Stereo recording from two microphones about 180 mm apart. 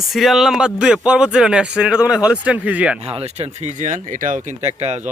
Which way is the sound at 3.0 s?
35° right (ahead or behind).